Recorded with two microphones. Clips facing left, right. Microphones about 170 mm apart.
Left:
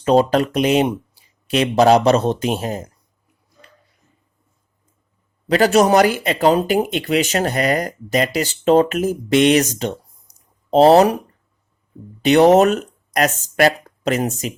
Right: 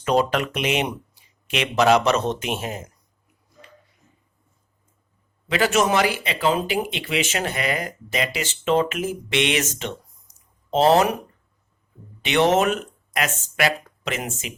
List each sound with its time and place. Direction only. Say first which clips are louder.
0.0 s speech: left 6 dB; 30° left (ahead or behind)
5.5 s speech: left 7 dB; 40° left (ahead or behind)
12.2 s speech: left 8 dB; 35° left (ahead or behind)